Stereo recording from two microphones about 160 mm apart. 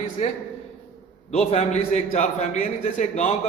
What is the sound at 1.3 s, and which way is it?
A man's voice, 45° left (ahead or behind).